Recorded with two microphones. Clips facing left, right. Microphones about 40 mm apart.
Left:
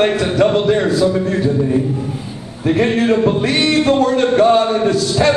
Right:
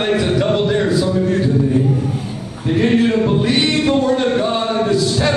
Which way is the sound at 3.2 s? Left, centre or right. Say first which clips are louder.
Left 1 dB; centre.